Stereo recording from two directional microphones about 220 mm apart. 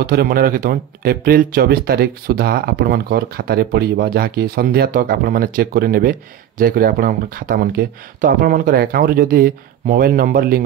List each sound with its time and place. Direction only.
0.0 s speech: 45° right (ahead or behind)